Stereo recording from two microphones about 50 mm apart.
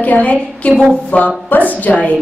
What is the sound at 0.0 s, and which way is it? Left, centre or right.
A woman's voice, left.